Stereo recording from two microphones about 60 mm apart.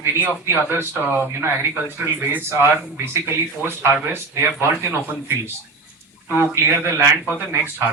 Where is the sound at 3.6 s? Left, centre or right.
Right.